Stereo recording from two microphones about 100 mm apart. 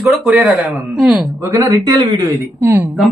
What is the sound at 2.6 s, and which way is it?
Speech, 25° right (ahead or behind).